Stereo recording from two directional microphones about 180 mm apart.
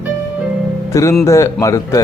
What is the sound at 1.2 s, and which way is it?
Speech, 15° left (ahead or behind).